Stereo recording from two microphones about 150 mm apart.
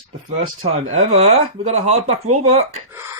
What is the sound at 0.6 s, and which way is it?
Speech, 45° right (ahead or behind).